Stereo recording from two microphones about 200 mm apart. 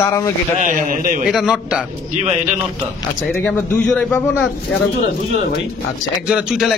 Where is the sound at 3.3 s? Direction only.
5° left (ahead or behind).